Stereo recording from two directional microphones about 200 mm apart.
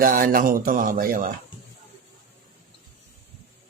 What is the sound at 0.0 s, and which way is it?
Speech, 45° right (ahead or behind).